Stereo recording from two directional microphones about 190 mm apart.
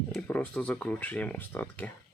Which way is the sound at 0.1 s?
5° left (ahead or behind).